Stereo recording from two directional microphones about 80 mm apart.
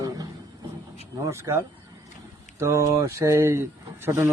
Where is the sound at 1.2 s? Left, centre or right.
Right.